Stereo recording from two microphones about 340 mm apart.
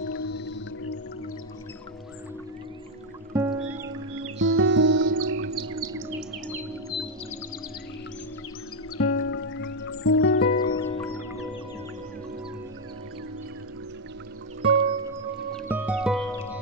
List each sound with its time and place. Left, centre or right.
0.2 s music: left
3.3 s music: centre
4.2 s music: right
8.9 s music: left
10.6 s music: centre
14.6 s music: centre
15.5 s music: centre